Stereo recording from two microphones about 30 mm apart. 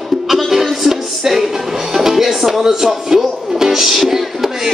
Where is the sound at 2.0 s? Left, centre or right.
Centre.